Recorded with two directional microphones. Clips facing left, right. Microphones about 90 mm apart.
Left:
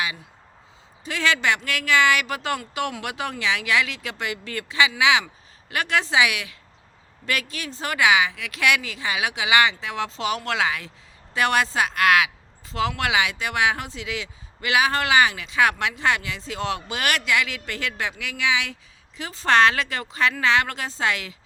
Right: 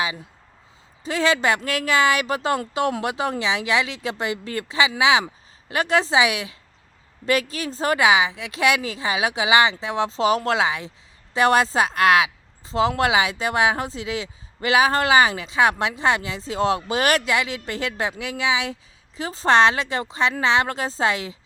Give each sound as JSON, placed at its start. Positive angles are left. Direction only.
{"t": 1.0, "sound": "speech", "side_deg": -30}